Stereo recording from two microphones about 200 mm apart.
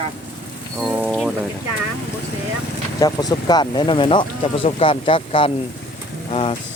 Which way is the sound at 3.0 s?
20° left (ahead or behind).